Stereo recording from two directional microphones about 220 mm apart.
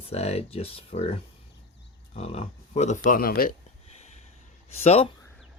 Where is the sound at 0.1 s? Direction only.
30° left (ahead or behind).